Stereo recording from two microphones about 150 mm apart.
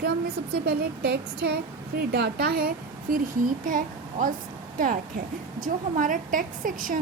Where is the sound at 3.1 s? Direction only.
70° right (ahead or behind).